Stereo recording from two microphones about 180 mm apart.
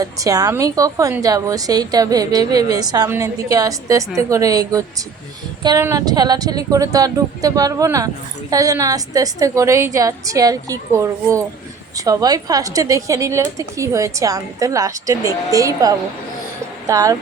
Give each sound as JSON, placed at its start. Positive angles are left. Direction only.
{"t": 0.0, "sound": "a woman's voice", "side_deg": -20}